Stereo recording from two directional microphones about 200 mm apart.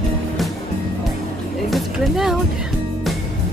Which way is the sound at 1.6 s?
Centre (ahead or behind).